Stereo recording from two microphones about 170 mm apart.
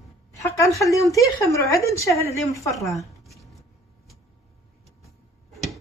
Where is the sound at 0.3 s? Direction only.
20° left (ahead or behind).